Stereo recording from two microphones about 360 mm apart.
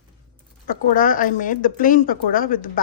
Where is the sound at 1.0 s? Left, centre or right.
Left.